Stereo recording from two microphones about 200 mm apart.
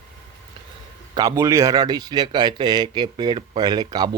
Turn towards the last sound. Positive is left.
turn(degrees=-20)  # may be behind; listen again after turning